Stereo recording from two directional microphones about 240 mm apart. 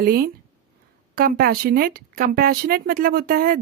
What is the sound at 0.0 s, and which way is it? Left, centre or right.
Speech, right.